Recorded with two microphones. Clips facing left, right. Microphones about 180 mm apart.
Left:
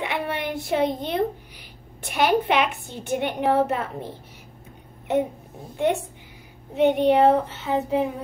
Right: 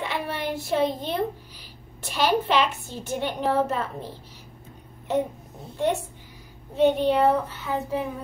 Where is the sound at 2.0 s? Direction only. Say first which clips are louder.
Left 2 dB; 60° left (ahead or behind).